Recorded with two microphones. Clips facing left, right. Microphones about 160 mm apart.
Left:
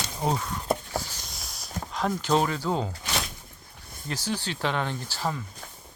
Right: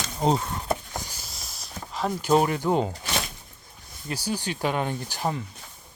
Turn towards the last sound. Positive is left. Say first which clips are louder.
# right 2 dB
turn(degrees=-15)  # may be behind; listen again after turning